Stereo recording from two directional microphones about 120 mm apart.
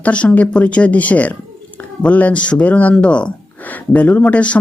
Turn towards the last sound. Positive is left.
turn(degrees=10)  # may be behind; listen again after turning